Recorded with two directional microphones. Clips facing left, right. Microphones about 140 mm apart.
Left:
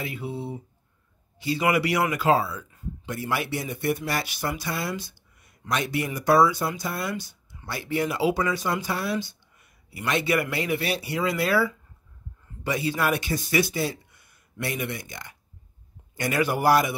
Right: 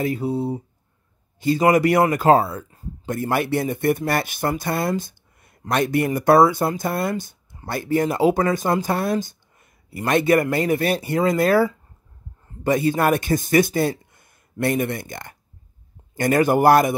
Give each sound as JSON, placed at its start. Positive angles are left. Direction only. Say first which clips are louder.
{"t": 0.0, "sound": "speech", "louder": "right 10 dB", "side_deg": -40}